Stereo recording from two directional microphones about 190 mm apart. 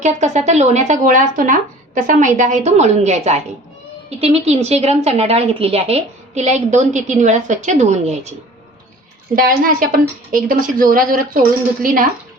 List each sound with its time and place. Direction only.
0.0 s a woman's voice: 35° right (ahead or behind)
9.3 s a woman's voice: 45° right (ahead or behind)